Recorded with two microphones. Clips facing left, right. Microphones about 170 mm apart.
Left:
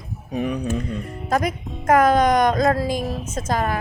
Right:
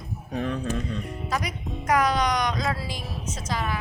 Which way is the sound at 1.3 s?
50° left (ahead or behind).